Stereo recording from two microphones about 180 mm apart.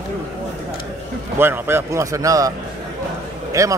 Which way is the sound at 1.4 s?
15° right (ahead or behind).